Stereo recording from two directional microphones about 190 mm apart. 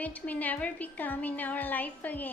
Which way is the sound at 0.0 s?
10° left (ahead or behind).